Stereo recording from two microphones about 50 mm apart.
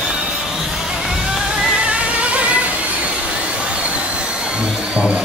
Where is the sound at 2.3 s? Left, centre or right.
Right.